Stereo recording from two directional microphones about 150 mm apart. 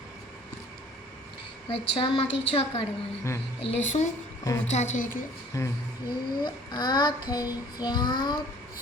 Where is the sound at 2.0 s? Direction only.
40° left (ahead or behind).